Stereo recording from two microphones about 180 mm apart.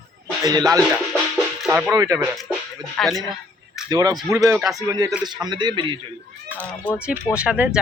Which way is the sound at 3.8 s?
20° right (ahead or behind).